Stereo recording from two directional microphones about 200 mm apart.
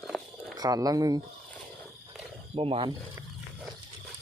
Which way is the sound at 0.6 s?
20° right (ahead or behind).